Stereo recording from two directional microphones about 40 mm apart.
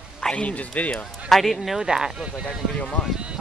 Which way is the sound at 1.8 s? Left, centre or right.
Centre.